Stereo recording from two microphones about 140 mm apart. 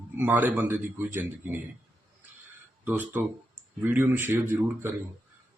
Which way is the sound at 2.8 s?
15° right (ahead or behind).